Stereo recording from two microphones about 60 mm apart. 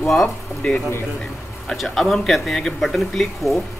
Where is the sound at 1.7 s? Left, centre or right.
Centre.